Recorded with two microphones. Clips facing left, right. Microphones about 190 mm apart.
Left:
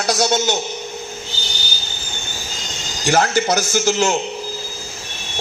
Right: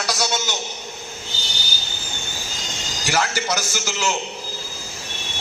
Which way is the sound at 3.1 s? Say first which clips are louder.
Left 7 dB; 50° left (ahead or behind).